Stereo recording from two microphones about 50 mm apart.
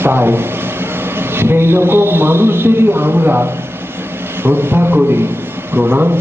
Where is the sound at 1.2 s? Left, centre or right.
Right.